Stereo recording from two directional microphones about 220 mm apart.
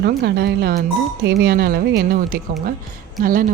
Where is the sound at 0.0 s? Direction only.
45° right (ahead or behind).